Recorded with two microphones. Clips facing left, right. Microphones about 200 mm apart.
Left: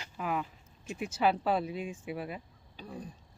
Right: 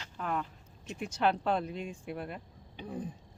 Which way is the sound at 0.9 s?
5° left (ahead or behind).